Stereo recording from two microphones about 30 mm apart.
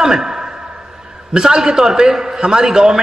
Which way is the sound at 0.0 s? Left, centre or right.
Centre.